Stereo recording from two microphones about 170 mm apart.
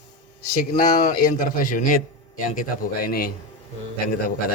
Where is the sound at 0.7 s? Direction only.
55° left (ahead or behind).